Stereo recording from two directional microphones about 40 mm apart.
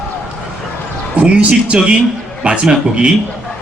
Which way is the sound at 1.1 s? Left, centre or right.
Right.